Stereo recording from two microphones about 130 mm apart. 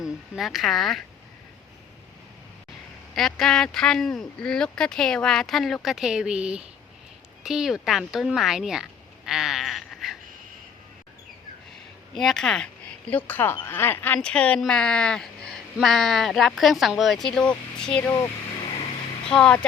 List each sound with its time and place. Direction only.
0.0 s speech: centre (ahead or behind)
3.2 s speech: 5° left (ahead or behind)
12.1 s speech: 5° left (ahead or behind)
18.6 s a sound: 50° left (ahead or behind)
19.3 s speech: 5° left (ahead or behind)